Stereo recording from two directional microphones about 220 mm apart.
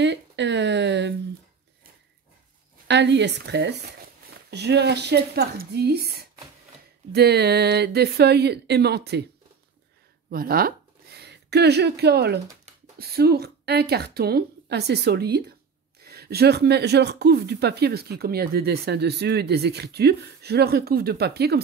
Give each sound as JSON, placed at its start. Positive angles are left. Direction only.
{"t": 0.0, "sound": "a sound", "side_deg": -55}
{"t": 2.9, "sound": "speech", "side_deg": -50}
{"t": 10.3, "sound": "speech", "side_deg": -40}